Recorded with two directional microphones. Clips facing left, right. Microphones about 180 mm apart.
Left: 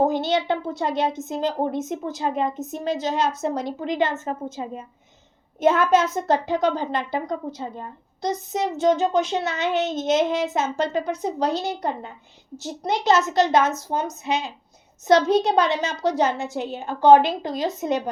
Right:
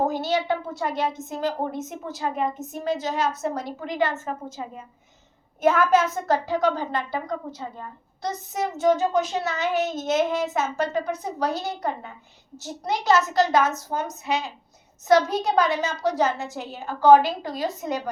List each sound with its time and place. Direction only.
0.1 s a woman's voice: 20° left (ahead or behind)